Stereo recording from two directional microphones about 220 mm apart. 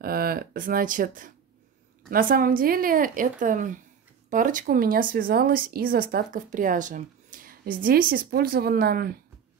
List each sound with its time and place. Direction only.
0.0 s speech: 45° right (ahead or behind)